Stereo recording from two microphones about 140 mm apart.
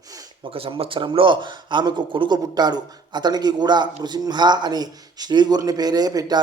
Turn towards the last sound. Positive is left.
turn(degrees=-25)  # may be behind; listen again after turning